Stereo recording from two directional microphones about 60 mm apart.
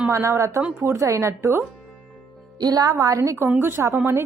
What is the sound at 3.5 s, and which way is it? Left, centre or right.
Speech, right.